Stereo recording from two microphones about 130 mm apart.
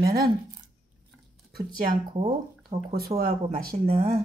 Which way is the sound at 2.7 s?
50° right (ahead or behind).